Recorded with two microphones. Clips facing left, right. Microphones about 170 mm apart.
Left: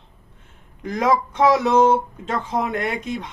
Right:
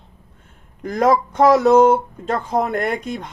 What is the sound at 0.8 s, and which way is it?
Speech, 40° right (ahead or behind).